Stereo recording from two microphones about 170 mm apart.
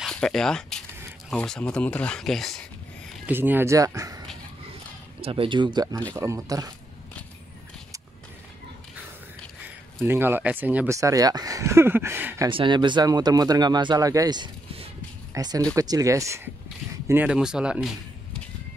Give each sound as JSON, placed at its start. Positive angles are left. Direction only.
{"t": 0.0, "sound": "a sound", "side_deg": 5}
{"t": 1.3, "sound": "speech", "side_deg": 5}
{"t": 3.3, "sound": "speech", "side_deg": -10}
{"t": 5.2, "sound": "speech", "side_deg": -30}
{"t": 10.0, "sound": "speech", "side_deg": -15}
{"t": 12.4, "sound": "speech", "side_deg": -30}